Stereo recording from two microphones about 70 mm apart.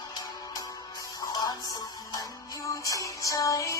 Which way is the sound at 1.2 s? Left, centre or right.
Left.